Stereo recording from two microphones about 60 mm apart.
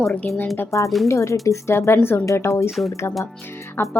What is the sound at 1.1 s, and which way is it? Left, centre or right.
Speech, left.